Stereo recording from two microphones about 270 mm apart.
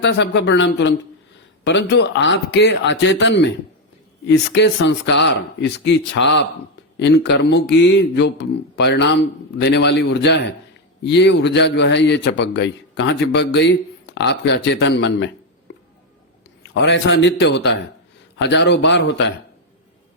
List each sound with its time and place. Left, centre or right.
0.0 s a man's voice: left
15.7 s a sound: left
16.8 s a man's voice: left